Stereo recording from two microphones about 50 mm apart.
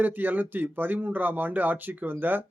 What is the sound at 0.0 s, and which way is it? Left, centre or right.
Speech, right.